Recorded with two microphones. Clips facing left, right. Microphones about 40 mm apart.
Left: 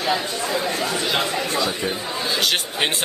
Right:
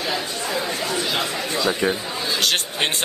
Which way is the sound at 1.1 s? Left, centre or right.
Centre.